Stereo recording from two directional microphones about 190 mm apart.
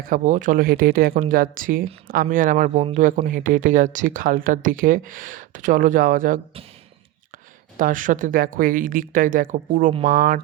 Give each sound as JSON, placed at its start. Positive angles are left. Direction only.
{"t": 0.0, "sound": "speech", "side_deg": -45}
{"t": 7.8, "sound": "speech", "side_deg": -45}